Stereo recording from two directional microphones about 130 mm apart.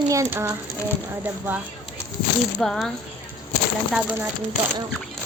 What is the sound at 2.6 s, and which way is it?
Speech, 5° left (ahead or behind).